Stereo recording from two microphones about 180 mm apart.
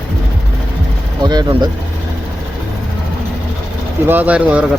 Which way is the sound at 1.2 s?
25° right (ahead or behind).